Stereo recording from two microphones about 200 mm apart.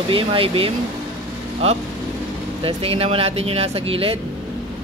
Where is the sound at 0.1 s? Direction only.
25° right (ahead or behind).